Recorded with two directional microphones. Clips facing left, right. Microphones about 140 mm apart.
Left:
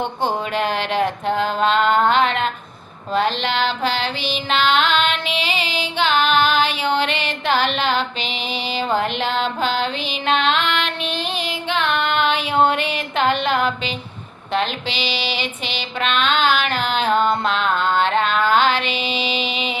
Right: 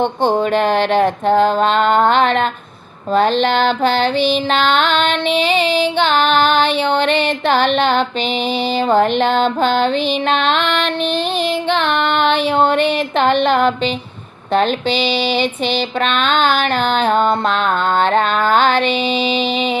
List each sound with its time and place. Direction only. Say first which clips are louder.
0.0 s mantra: right 7 dB; 30° right (ahead or behind)
3.4 s mantra: right 6 dB; 50° right (ahead or behind)
4.7 s a sound: right 1 dB; centre (ahead or behind)
4.9 s mantra: right 5 dB; 35° right (ahead or behind)
9.0 s mantra: right 8 dB; 40° right (ahead or behind)
11.8 s mantra: left 1 dB; 35° right (ahead or behind)
14.9 s a sound: right 8 dB; centre (ahead or behind)
15.6 s mantra: right 7 dB; 40° right (ahead or behind)
18.9 s a sound: right 7 dB; centre (ahead or behind)
19.4 s mantra: right 7 dB; 40° right (ahead or behind)